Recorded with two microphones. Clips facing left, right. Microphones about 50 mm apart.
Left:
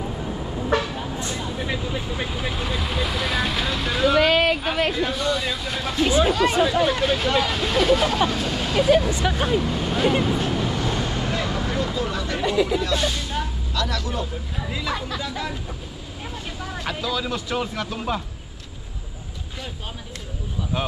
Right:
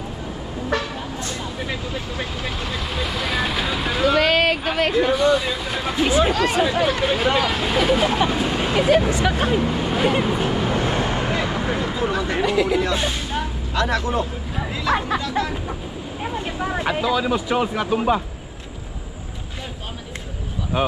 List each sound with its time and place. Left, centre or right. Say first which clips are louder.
2.3 s vehicle: even; centre
4.2 s vehicle: even; right
5.1 s speech: right 6 dB; centre
5.9 s speech: right 1 dB; right
6.9 s speech: right 2 dB; centre
8.9 s speech: right 2 dB; right
9.7 s speech: right 2 dB; centre
10.1 s vehicle: right 2 dB; centre
12.4 s speech: right 1 dB; right
12.8 s a sound: right 1 dB; right
13.8 s speech: right 6 dB; right; by 18.2 s centre
20.7 s speech: right 6 dB; centre